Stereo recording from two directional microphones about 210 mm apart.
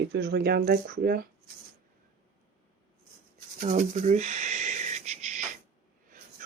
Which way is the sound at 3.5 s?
40° right (ahead or behind).